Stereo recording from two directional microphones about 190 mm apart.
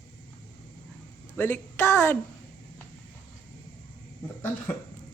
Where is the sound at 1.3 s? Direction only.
10° left (ahead or behind).